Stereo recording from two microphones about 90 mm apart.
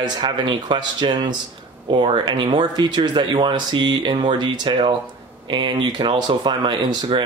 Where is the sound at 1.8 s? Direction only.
75° right (ahead or behind).